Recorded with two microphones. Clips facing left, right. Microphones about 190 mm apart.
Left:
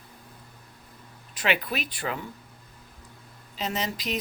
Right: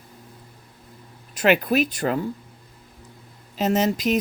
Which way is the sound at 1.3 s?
45° right (ahead or behind).